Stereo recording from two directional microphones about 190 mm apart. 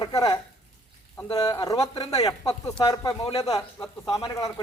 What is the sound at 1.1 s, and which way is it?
Speech, 15° left (ahead or behind).